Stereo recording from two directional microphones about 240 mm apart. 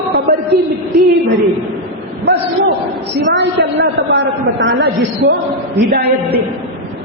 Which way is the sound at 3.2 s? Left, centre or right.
Right.